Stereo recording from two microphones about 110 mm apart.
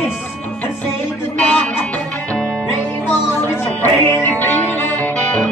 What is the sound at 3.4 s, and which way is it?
Music, 20° left (ahead or behind).